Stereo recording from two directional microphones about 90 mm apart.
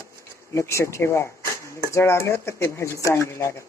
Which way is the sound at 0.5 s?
30° left (ahead or behind).